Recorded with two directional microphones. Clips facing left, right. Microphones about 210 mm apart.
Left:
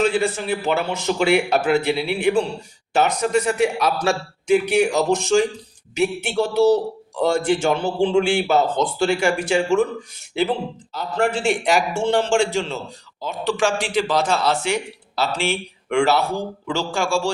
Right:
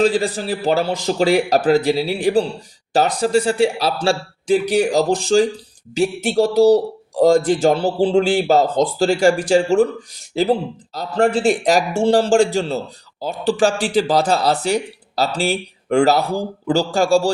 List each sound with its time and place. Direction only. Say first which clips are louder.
0.0 s speech: right 3 dB; 35° right (ahead or behind)